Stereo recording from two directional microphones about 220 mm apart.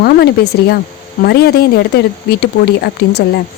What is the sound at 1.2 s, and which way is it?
Speech, 45° left (ahead or behind).